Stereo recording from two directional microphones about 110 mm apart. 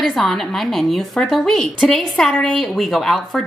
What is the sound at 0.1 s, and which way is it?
A woman's voice, 5° left (ahead or behind).